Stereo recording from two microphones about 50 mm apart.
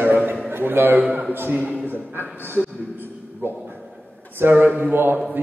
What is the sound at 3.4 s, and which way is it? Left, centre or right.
A man's voice, right.